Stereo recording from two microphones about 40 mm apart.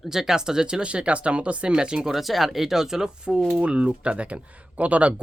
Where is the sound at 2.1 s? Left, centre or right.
Centre.